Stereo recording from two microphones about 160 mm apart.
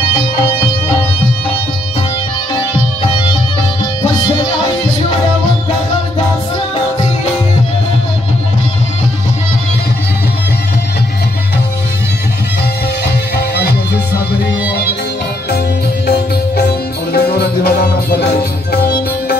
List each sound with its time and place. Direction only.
0.1 s music: 35° left (ahead or behind)
14.7 s music: 85° left
16.1 s music: 90° left